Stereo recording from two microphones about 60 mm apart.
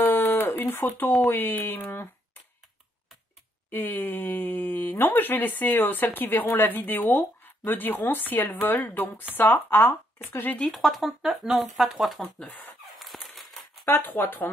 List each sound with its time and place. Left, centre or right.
0.0 s speech: left
3.7 s speech: left
10.7 s speech: centre
13.0 s a sound: centre
13.8 s speech: left